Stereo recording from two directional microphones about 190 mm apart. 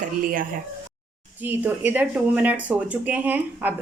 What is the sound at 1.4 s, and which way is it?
Speech, 10° right (ahead or behind).